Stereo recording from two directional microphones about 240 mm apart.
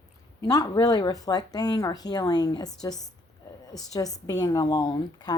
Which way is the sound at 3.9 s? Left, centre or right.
Centre.